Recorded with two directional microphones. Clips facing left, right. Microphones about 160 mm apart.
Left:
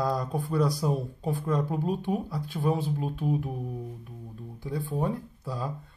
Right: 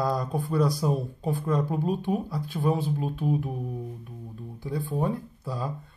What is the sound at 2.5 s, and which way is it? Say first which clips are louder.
Speech: right 1 dB; 40° right (ahead or behind).